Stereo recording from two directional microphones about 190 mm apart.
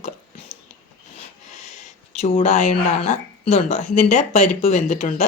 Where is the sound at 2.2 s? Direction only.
30° left (ahead or behind).